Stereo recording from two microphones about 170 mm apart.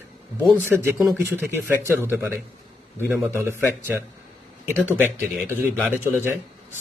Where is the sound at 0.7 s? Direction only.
5° right (ahead or behind).